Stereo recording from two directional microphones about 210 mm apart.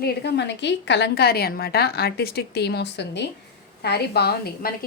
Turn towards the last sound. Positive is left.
turn(degrees=45)  # may be behind; listen again after turning